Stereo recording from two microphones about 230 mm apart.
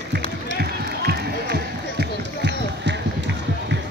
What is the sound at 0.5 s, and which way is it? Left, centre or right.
Run, right.